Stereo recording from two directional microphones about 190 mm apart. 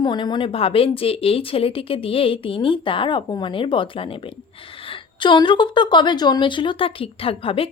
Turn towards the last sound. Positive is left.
turn(degrees=30)  # may be behind; listen again after turning